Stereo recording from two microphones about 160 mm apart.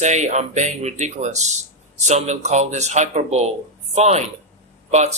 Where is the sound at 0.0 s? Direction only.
50° right (ahead or behind).